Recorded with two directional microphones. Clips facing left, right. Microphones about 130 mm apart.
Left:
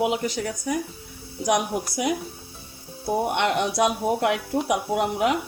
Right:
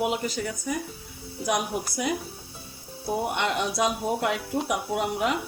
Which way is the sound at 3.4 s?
60° left (ahead or behind).